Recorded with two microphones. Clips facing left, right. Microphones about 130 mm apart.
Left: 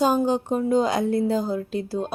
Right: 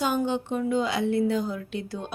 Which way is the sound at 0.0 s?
35° left (ahead or behind).